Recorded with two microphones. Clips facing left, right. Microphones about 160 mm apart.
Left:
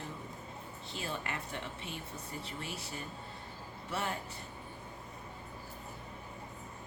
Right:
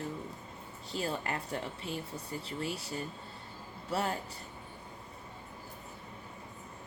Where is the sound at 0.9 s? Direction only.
35° right (ahead or behind).